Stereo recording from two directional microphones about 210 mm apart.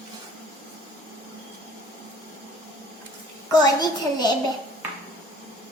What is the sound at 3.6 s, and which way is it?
Speech, 20° left (ahead or behind).